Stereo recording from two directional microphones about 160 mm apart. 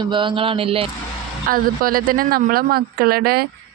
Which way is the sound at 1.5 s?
65° right (ahead or behind).